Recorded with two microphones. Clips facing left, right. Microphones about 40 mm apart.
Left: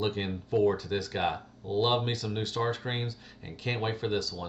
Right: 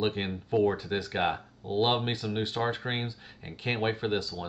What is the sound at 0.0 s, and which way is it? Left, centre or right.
Speech, right.